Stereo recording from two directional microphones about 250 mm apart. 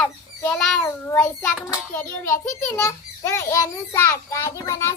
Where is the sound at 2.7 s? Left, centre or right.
Centre.